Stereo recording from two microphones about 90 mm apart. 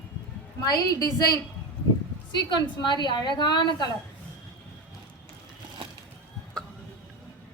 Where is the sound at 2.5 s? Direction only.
55° left (ahead or behind).